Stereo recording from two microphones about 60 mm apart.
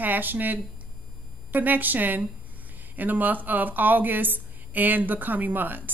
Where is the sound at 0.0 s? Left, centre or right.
Right.